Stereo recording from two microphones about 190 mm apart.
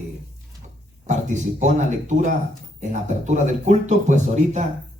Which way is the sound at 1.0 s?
40° right (ahead or behind).